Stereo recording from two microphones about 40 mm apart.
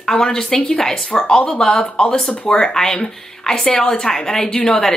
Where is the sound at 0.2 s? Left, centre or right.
Centre.